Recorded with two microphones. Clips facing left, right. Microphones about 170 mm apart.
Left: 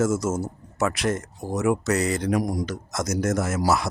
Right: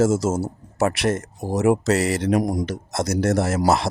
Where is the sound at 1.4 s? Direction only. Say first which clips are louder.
Right 4 dB; 30° right (ahead or behind).